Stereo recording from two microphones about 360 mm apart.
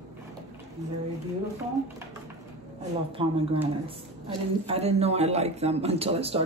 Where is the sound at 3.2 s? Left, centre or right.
Centre.